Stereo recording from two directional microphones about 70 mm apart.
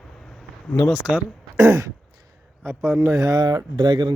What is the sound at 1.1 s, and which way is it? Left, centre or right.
Speech, centre.